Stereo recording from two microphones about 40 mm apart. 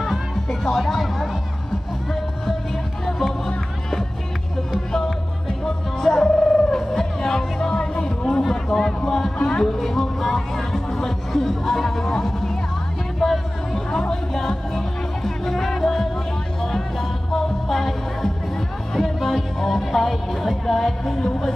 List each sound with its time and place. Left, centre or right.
0.0 s music: centre
3.1 s music: centre
4.9 s music: centre
8.4 s speech: centre
9.4 s speech: left
9.7 s speech: centre
10.8 s music: centre
11.3 s speech: centre
13.2 s a sound: centre
14.0 s music: centre